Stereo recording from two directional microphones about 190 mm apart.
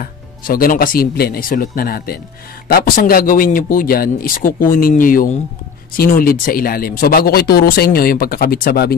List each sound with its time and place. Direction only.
0.0 s speech: 50° left (ahead or behind)